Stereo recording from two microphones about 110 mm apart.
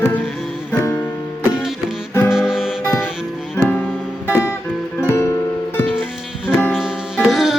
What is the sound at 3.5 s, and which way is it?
Music, 15° left (ahead or behind).